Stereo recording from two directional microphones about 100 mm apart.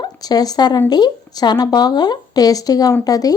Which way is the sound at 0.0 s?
40° left (ahead or behind).